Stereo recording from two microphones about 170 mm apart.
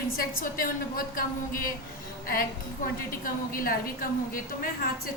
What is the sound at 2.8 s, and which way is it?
A woman's voice, 55° left (ahead or behind).